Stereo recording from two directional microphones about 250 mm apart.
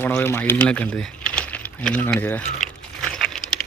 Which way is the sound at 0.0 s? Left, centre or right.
Centre.